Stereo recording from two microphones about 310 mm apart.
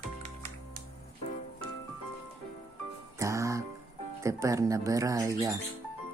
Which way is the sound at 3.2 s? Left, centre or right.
Centre.